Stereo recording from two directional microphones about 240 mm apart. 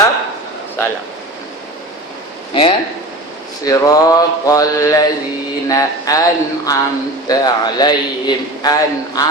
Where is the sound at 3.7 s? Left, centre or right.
Centre.